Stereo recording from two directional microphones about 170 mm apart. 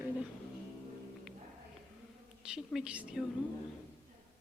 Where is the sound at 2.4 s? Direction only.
5° right (ahead or behind).